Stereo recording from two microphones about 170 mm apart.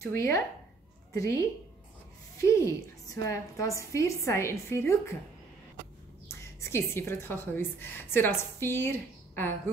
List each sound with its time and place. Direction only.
0.0 s a woman's voice: 15° left (ahead or behind)
6.2 s a woman's voice: 15° left (ahead or behind)